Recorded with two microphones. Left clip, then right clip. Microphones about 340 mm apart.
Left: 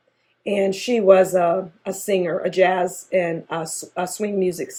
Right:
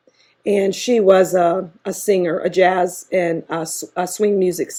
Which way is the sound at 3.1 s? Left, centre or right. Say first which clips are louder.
Right 2 dB; right.